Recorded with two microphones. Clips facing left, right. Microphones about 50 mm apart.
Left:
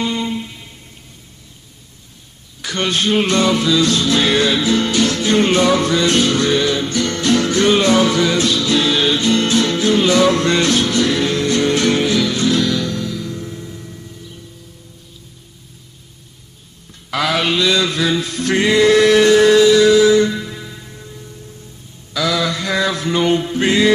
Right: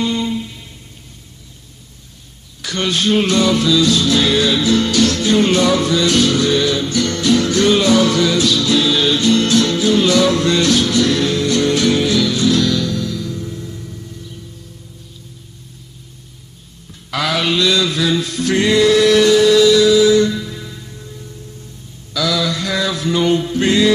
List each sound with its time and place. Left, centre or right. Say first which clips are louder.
0.0 s music: right 1 dB; centre
2.6 s a sound: even; centre
2.9 s music: right 1 dB; centre; by 8.5 s left
8.5 s music: right 1 dB; centre
17.1 s music: left 1 dB; centre
18.9 s music: left 1 dB; left
20.2 s music: even; left
22.1 s mantra: even; left